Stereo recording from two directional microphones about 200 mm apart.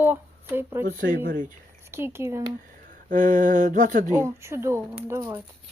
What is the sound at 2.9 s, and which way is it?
Speech, 40° right (ahead or behind).